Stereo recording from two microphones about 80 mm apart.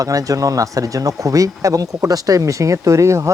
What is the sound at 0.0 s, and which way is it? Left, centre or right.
Speech, right.